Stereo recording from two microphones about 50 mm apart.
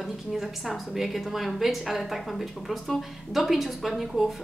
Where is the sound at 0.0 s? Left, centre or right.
Centre.